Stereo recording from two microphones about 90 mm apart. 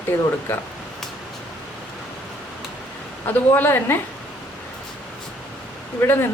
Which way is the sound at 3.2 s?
25° left (ahead or behind).